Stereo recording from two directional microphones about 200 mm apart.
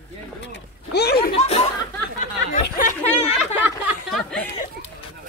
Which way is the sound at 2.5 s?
35° left (ahead or behind).